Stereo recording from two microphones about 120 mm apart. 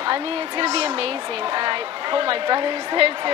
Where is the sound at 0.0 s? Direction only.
45° right (ahead or behind).